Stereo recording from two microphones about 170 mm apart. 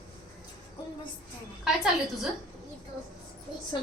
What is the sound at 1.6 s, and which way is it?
Speech, centre (ahead or behind).